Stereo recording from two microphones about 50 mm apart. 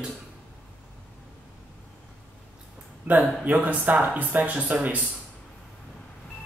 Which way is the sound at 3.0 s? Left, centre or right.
Right.